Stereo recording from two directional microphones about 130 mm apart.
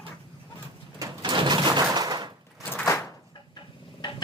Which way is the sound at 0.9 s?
30° right (ahead or behind).